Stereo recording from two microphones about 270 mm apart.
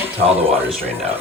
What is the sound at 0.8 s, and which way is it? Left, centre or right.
Speech, right.